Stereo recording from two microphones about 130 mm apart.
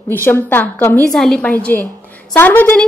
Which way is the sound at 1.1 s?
5° left (ahead or behind).